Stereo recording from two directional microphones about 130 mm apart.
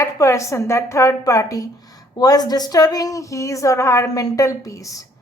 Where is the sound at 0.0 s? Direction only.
25° left (ahead or behind).